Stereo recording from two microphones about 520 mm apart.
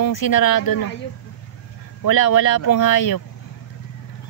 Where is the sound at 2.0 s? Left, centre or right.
Left.